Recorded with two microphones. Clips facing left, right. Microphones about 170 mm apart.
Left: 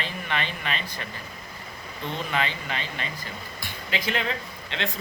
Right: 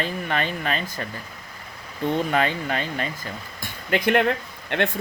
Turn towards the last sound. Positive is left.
turn(degrees=-55)  # may be behind; listen again after turning